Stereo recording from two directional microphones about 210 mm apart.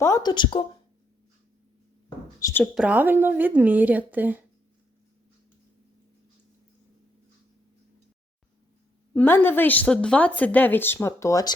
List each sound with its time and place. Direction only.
0.0 s a woman's voice: 15° left (ahead or behind)
2.4 s a woman's voice: 10° left (ahead or behind)
2.7 s a woman's voice: 5° right (ahead or behind)
9.1 s a woman's voice: 10° left (ahead or behind)